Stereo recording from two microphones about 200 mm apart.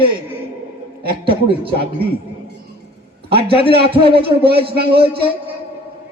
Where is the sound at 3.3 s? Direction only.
25° right (ahead or behind).